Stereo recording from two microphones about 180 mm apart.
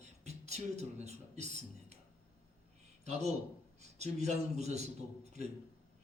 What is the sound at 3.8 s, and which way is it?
A man's voice, 35° right (ahead or behind).